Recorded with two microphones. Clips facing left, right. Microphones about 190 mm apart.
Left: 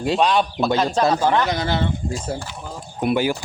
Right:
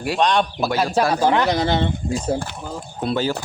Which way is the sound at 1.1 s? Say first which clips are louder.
Right 1 dB; 15° right (ahead or behind).